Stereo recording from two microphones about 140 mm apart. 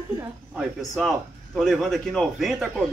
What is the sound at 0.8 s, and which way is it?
Speech, centre (ahead or behind).